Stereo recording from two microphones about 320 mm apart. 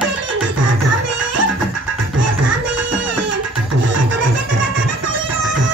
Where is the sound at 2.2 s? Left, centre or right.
Right.